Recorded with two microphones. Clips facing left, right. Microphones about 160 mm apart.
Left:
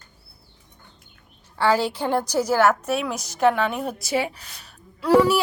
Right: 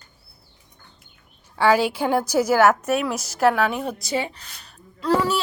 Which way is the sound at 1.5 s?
15° right (ahead or behind).